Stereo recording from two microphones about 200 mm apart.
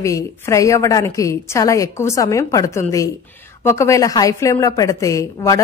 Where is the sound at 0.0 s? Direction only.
15° left (ahead or behind).